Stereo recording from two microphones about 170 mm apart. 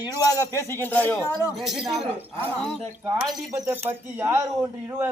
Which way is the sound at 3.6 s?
10° right (ahead or behind).